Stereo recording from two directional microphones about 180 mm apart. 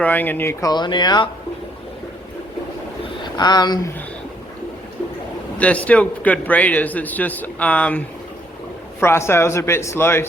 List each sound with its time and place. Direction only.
0.0 s speech: 10° left (ahead or behind)
3.3 s speech: 25° left (ahead or behind)
5.5 s a man's voice: 5° left (ahead or behind)